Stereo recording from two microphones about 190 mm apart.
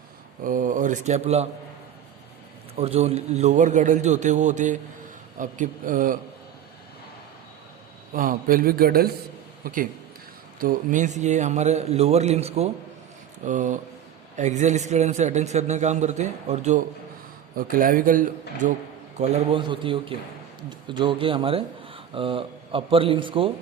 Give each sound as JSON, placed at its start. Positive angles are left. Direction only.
{"t": 0.4, "sound": "speech", "side_deg": -45}
{"t": 2.7, "sound": "a man's voice", "side_deg": -35}
{"t": 8.1, "sound": "a man's voice", "side_deg": -45}